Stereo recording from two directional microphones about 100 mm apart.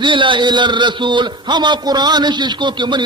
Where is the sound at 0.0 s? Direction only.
55° right (ahead or behind).